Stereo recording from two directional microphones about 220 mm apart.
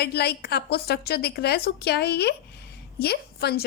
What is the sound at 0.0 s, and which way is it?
A woman's voice, 45° left (ahead or behind).